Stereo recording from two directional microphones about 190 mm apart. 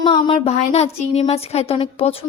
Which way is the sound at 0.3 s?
35° left (ahead or behind).